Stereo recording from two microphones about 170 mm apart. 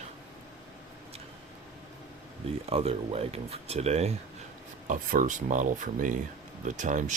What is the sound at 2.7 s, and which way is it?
Speech, 35° right (ahead or behind).